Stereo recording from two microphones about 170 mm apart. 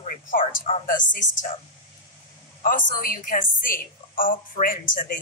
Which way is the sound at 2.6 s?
55° left (ahead or behind).